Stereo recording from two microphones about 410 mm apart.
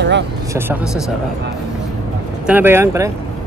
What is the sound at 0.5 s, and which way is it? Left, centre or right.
Speech, centre.